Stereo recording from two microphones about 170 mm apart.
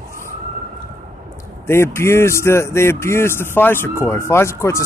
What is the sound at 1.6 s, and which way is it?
A man's voice, 15° left (ahead or behind).